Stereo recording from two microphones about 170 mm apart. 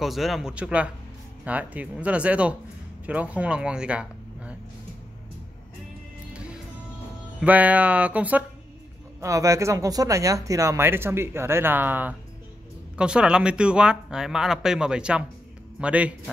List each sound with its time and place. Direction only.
0.0 s speech: centre (ahead or behind)
7.3 s speech: 10° right (ahead or behind)